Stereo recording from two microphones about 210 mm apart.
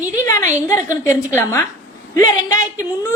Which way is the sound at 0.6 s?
15° left (ahead or behind).